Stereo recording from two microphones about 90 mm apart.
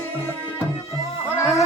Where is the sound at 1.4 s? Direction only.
30° left (ahead or behind).